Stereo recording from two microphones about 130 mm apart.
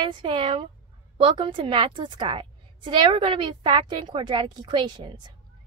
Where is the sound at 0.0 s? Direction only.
40° right (ahead or behind).